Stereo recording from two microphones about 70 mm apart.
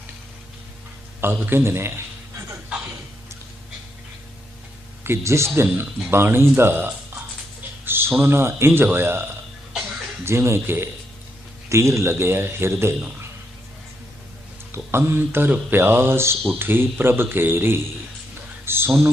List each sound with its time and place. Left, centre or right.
1.2 s speech: right
5.0 s speech: right
14.7 s a man's voice: right